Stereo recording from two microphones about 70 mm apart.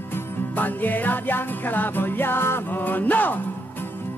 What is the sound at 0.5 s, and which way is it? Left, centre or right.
Music, left.